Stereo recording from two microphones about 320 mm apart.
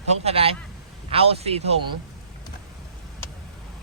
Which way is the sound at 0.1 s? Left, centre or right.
Centre.